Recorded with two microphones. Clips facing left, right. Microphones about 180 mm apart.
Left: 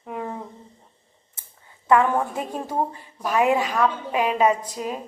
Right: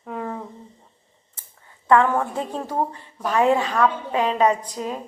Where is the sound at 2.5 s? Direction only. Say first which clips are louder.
Right 1 dB; 15° left (ahead or behind).